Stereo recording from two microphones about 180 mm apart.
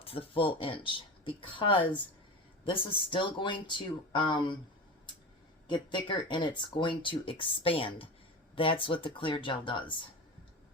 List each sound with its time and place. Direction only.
0.0 s speech: 30° left (ahead or behind)
5.6 s speech: 25° left (ahead or behind)